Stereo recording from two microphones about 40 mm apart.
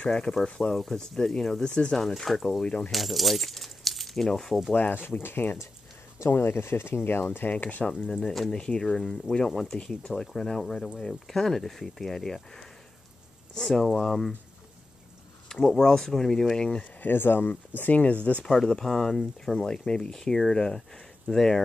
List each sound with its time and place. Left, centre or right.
0.5 s speech: left
0.7 s speech: centre
1.6 s speech: centre
2.6 s speech: left
2.9 s speech: centre
4.7 s speech: left
6.3 s speech: left
7.4 s speech: left
8.0 s speech: centre
15.5 s speech: centre
16.5 s speech: left
17.0 s speech: left
18.5 s speech: centre